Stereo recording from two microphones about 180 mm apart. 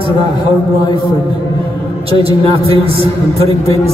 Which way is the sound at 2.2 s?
30° right (ahead or behind).